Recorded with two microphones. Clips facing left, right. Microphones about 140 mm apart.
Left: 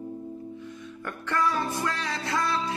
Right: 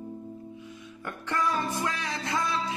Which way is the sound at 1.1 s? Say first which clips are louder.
Left 2 dB; 15° right (ahead or behind).